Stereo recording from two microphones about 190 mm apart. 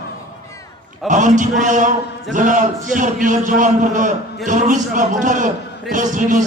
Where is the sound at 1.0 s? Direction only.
40° right (ahead or behind).